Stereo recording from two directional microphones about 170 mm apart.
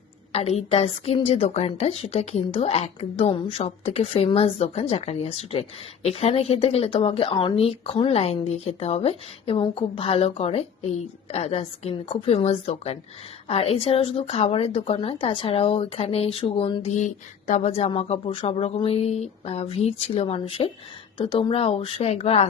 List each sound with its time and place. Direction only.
0.3 s a woman's voice: 35° left (ahead or behind)
16.9 s a woman's voice: 45° left (ahead or behind)